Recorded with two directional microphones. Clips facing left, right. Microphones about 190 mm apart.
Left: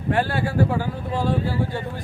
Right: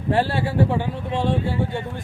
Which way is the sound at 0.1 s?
30° right (ahead or behind).